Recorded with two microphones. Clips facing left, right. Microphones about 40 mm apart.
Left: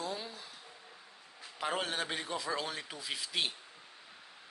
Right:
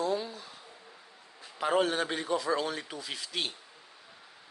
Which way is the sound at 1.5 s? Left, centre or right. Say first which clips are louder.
Right 7 dB; centre.